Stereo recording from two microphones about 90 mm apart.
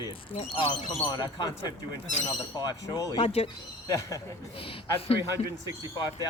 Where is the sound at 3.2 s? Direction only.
90° left.